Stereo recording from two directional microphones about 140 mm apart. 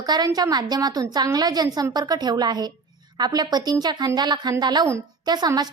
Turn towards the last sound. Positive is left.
turn(degrees=-30)  # may be behind; listen again after turning